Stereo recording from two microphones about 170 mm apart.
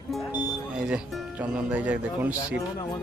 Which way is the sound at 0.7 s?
5° right (ahead or behind).